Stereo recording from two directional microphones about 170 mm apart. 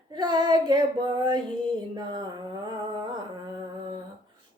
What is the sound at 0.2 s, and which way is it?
Child singing, 25° right (ahead or behind).